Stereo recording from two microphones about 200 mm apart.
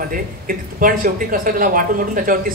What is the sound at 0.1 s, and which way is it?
Speech, 45° right (ahead or behind).